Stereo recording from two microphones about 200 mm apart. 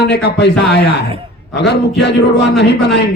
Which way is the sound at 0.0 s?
55° left (ahead or behind).